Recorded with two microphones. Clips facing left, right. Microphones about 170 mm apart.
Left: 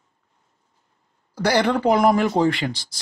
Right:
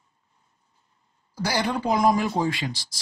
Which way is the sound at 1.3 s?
60° left (ahead or behind).